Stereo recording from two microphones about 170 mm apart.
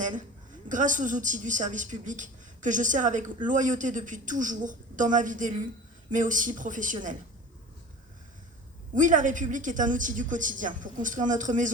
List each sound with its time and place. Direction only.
0.0 s a sound: 50° right (ahead or behind)
0.7 s a woman's voice: 50° right (ahead or behind)
9.0 s a woman's voice: 50° right (ahead or behind)